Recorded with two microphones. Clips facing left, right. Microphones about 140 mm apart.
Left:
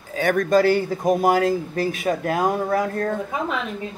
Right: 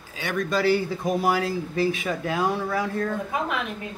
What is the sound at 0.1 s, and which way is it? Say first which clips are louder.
Speech: left 8 dB; 50° left (ahead or behind).